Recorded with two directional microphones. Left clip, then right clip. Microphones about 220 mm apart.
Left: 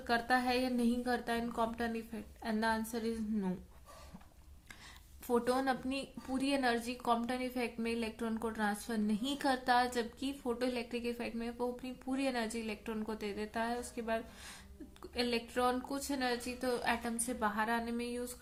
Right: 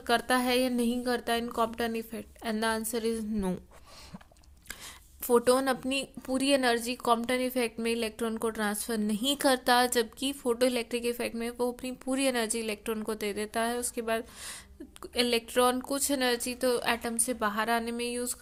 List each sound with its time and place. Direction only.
0.0 s a woman's voice: 40° right (ahead or behind)
5.2 s a woman's voice: 40° right (ahead or behind)